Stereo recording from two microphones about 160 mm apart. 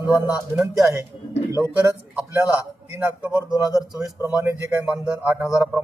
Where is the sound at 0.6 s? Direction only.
20° right (ahead or behind).